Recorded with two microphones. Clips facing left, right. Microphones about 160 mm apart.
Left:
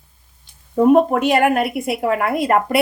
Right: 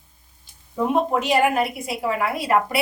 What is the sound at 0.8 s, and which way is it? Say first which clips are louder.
A woman's voice: left 8 dB; 55° left (ahead or behind).